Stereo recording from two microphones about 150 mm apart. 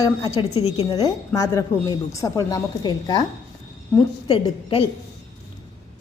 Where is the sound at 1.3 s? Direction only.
20° left (ahead or behind).